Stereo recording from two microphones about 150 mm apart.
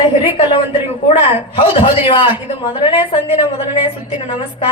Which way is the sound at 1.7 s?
35° left (ahead or behind).